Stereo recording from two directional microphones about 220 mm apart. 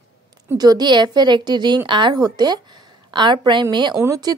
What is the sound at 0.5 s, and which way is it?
A woman's voice, 20° right (ahead or behind).